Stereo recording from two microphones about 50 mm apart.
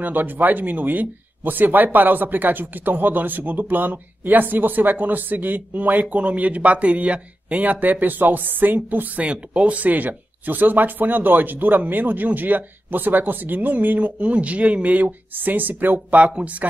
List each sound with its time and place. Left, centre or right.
0.0 s speech: right